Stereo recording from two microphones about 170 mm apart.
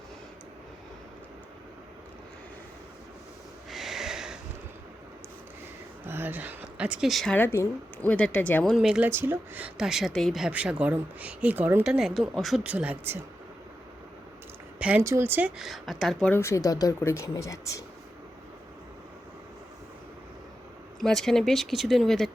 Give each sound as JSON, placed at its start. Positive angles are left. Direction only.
{"t": 3.7, "sound": "snort", "side_deg": 0}
{"t": 6.1, "sound": "speech", "side_deg": -10}
{"t": 7.3, "sound": "a woman's voice", "side_deg": 15}
{"t": 8.7, "sound": "speech", "side_deg": -5}
{"t": 14.8, "sound": "a woman's voice", "side_deg": -5}
{"t": 21.0, "sound": "speech", "side_deg": 5}